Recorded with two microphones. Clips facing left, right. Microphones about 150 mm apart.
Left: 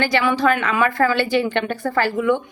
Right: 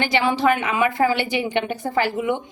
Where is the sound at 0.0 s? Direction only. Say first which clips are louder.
Left 1 dB; 20° right (ahead or behind).